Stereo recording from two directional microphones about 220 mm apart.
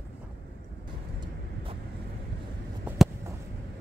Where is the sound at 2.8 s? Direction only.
10° right (ahead or behind).